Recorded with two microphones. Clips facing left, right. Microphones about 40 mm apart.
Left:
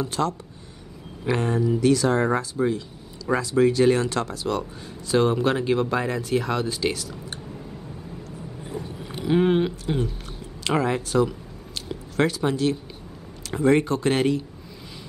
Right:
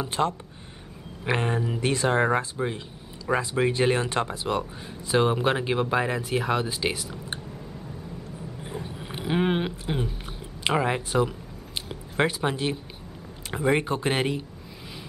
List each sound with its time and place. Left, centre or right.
0.0 s speech: right
8.6 s a sound: centre
10.8 s speech: right